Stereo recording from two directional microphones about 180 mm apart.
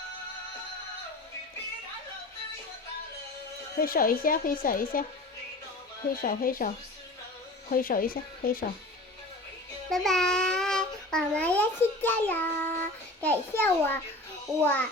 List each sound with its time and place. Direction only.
3.8 s speech: 50° left (ahead or behind)
6.2 s speech: 50° left (ahead or behind)
7.7 s speech: 55° left (ahead or behind)
9.9 s a child's voice: centre (ahead or behind)